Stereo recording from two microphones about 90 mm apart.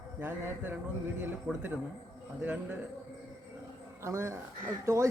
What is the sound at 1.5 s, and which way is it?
Speech, 10° right (ahead or behind).